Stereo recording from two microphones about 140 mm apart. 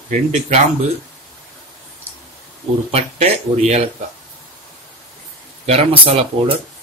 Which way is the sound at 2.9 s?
45° right (ahead or behind).